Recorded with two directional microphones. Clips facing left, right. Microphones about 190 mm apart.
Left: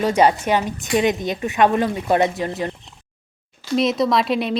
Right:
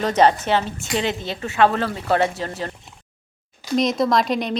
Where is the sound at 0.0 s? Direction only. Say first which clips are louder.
Left 1 dB; 10° left (ahead or behind).